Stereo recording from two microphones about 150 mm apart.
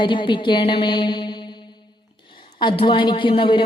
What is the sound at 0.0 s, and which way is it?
A man's voice, 35° left (ahead or behind).